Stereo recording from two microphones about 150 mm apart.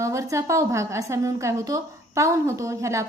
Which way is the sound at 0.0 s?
20° right (ahead or behind).